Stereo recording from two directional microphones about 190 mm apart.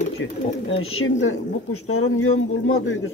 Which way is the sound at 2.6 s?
90° left.